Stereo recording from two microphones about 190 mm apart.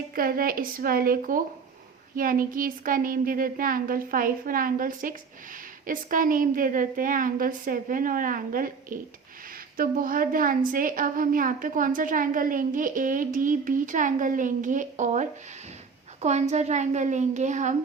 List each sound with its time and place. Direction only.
0.1 s a woman's voice: 50° right (ahead or behind)